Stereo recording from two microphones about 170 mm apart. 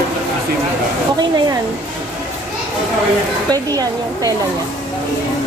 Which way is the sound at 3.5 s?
20° right (ahead or behind).